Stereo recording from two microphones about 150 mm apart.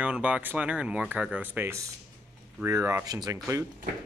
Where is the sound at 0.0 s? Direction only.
10° right (ahead or behind); by 3.3 s 25° right (ahead or behind).